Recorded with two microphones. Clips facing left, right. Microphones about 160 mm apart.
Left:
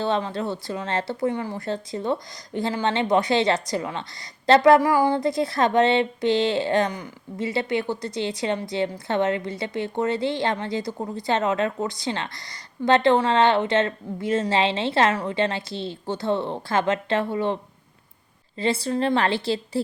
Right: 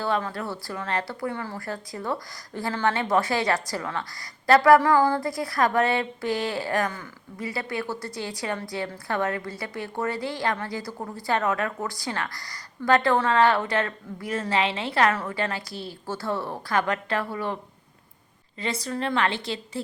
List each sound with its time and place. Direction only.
0.0 s a woman's voice: 25° left (ahead or behind)